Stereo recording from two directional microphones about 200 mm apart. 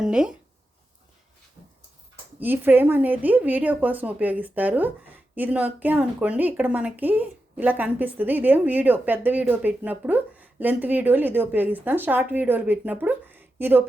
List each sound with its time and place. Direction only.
0.0 s speech: 5° right (ahead or behind)
2.4 s speech: 10° right (ahead or behind)